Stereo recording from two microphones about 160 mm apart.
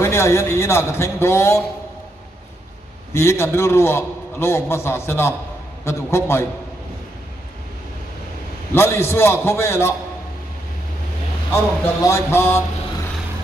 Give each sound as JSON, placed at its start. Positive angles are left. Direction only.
{"t": 0.0, "sound": "a man's voice", "side_deg": 15}
{"t": 3.1, "sound": "a man's voice", "side_deg": 15}
{"t": 8.7, "sound": "a man's voice", "side_deg": 15}
{"t": 11.5, "sound": "a man's voice", "side_deg": 15}